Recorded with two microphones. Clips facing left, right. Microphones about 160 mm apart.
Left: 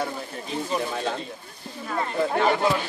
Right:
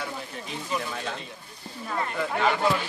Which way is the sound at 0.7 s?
35° left (ahead or behind).